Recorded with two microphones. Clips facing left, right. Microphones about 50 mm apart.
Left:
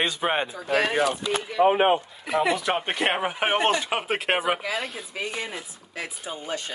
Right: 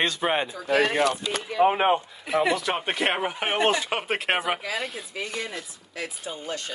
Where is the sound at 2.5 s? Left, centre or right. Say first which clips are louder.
Left 1 dB; centre.